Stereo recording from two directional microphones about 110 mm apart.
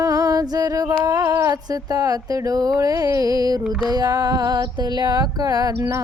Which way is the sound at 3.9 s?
35° right (ahead or behind).